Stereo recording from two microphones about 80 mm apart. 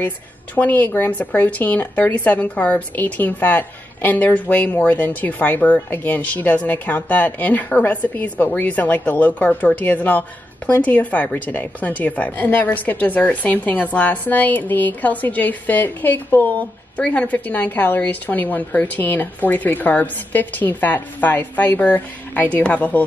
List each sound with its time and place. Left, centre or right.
0.6 s a woman's voice: left